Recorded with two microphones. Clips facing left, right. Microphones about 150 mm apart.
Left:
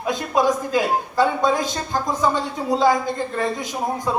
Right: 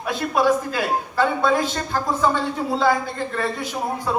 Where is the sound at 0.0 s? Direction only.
15° left (ahead or behind).